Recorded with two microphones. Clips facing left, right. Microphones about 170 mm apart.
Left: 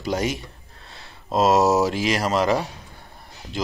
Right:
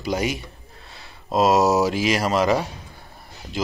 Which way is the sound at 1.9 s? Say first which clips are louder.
Right 1 dB; 20° right (ahead or behind).